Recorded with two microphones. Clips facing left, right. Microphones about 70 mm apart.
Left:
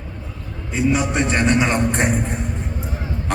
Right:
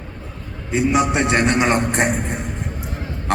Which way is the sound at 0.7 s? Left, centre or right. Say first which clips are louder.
Right 2 dB; right.